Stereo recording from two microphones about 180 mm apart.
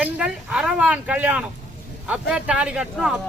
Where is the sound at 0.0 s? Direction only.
5° right (ahead or behind).